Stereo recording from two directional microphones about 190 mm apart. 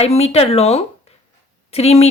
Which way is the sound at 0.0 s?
35° left (ahead or behind).